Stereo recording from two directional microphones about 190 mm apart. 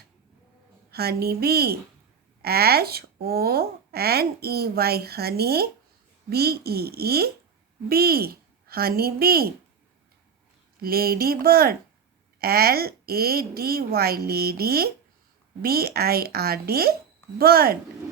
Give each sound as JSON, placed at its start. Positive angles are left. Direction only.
{"t": 0.9, "sound": "a woman's voice", "side_deg": -55}
{"t": 10.8, "sound": "a woman's voice", "side_deg": -50}